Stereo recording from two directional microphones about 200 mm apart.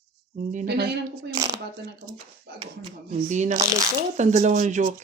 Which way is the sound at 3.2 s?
40° right (ahead or behind).